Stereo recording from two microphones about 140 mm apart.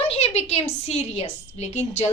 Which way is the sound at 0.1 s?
45° left (ahead or behind).